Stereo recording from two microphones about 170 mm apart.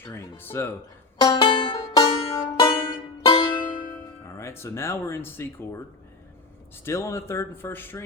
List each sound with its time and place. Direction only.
0.0 s speech: 15° left (ahead or behind)
1.2 s music: 25° left (ahead or behind)
4.4 s speech: 15° left (ahead or behind)
6.8 s speech: 15° left (ahead or behind)